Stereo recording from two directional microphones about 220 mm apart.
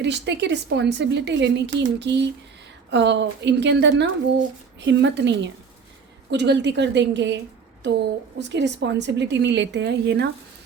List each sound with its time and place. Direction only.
0.0 s a woman's voice: 50° right (ahead or behind)